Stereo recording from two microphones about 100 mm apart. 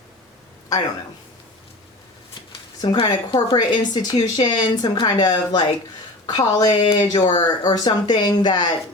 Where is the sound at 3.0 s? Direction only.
45° left (ahead or behind).